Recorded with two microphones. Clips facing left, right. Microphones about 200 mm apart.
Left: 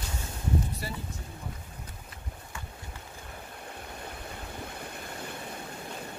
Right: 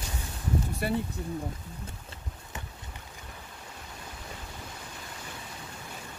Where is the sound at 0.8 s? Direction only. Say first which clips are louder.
Right 9 dB; 60° right (ahead or behind).